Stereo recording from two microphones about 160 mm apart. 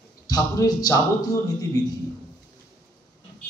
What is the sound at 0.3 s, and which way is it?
Speech, 25° left (ahead or behind).